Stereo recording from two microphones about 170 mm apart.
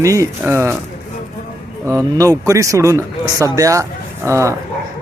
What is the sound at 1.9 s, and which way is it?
Speech, 20° right (ahead or behind).